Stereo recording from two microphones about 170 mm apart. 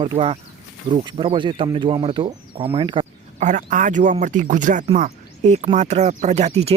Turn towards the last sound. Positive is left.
turn(degrees=-40)  # may be behind; listen again after turning